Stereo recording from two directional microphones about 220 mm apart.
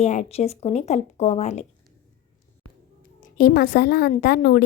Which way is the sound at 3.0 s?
40° left (ahead or behind).